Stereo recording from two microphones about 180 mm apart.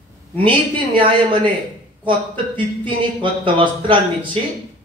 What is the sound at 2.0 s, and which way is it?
Speech, 25° right (ahead or behind).